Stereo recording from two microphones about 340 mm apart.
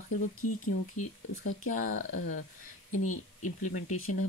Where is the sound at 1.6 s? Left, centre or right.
Left.